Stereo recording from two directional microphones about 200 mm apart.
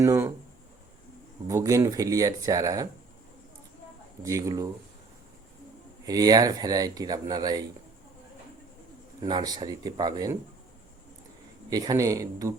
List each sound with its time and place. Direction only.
0.0 s speech: 15° right (ahead or behind)
1.5 s speech: 15° right (ahead or behind)
4.2 s speech: 15° right (ahead or behind)
6.1 s speech: 20° right (ahead or behind)
9.2 s speech: 20° right (ahead or behind)
11.7 s speech: 20° right (ahead or behind)